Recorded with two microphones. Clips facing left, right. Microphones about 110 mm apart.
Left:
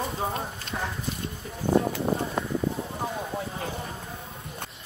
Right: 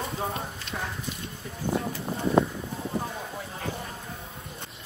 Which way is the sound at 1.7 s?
70° left (ahead or behind).